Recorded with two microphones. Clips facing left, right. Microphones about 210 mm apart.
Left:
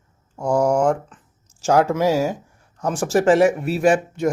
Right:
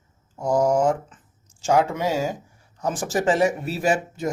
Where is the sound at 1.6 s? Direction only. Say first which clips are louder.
Left 4 dB; 75° left (ahead or behind).